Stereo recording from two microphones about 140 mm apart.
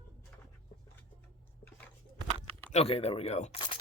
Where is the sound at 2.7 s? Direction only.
45° left (ahead or behind).